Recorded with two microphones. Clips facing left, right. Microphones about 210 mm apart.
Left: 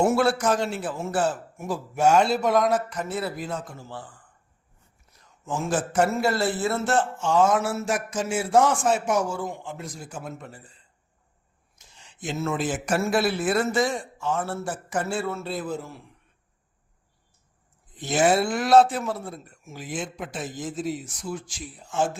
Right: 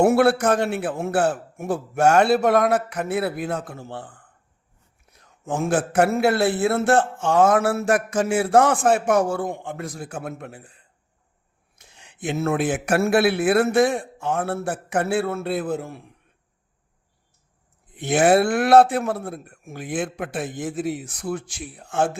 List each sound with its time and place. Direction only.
0.0 s a man's voice: 60° right (ahead or behind)
17.9 s a man's voice: 60° right (ahead or behind)